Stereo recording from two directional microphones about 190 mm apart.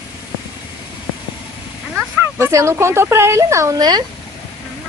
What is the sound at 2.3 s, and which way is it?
Speech, 15° right (ahead or behind).